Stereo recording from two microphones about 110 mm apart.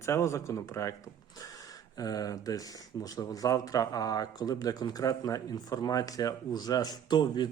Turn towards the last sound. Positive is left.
turn(degrees=40)  # may be behind; listen again after turning